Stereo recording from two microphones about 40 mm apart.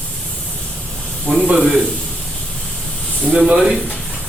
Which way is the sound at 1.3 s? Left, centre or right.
Centre.